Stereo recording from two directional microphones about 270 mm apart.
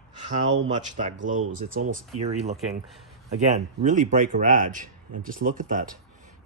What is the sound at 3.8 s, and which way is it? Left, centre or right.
Speech, right.